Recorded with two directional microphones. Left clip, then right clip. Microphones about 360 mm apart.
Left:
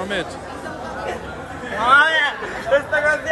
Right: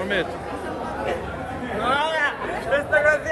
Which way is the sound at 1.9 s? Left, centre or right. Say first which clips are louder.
Left 11 dB; centre.